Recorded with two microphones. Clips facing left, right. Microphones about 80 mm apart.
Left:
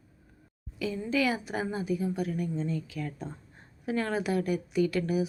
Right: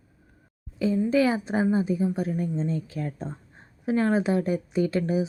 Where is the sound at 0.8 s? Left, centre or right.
Right.